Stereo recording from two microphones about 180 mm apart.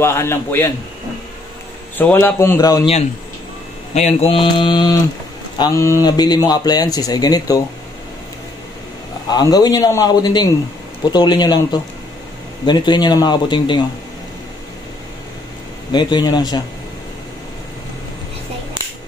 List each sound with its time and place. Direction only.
0.0 s a man's voice: 15° left (ahead or behind)
2.0 s a man's voice: 10° left (ahead or behind)
3.9 s a man's voice: 35° left (ahead or behind); by 7.6 s 20° left (ahead or behind)
9.3 s speech: 20° left (ahead or behind)
15.9 s speech: 25° left (ahead or behind)